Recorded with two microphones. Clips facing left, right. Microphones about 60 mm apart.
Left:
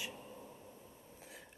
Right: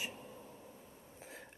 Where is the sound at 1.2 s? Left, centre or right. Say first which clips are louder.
Right 4 dB; right.